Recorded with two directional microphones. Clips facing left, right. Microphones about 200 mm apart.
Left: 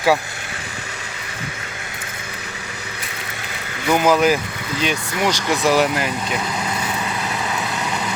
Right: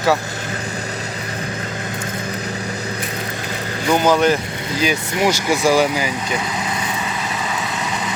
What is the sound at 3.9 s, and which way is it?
Speech, 5° left (ahead or behind).